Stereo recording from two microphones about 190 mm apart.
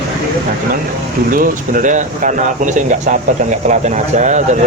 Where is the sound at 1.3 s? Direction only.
45° right (ahead or behind).